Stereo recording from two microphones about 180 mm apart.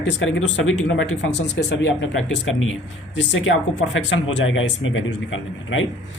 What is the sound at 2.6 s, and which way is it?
Speech, 90° left.